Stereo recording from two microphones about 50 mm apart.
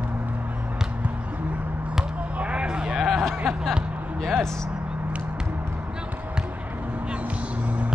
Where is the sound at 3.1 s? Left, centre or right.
Centre.